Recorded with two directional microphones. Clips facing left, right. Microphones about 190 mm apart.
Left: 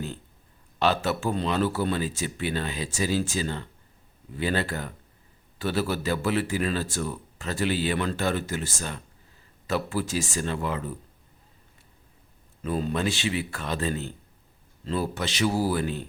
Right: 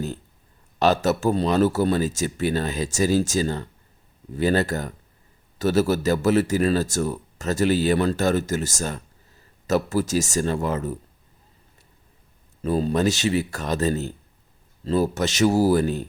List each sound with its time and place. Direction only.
0.8 s speech: 40° right (ahead or behind)
12.6 s speech: 35° right (ahead or behind)